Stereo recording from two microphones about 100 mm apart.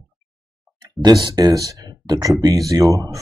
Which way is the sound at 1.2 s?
40° right (ahead or behind).